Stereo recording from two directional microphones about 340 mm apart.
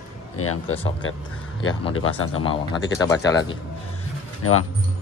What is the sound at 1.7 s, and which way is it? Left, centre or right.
Speech, centre.